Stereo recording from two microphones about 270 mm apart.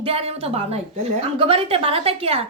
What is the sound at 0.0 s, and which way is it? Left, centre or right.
Speech, right.